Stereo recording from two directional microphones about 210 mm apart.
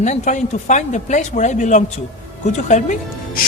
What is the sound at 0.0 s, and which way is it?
A man's voice, 35° left (ahead or behind).